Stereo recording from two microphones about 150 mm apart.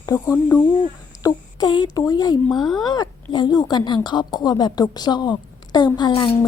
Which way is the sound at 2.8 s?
25° left (ahead or behind).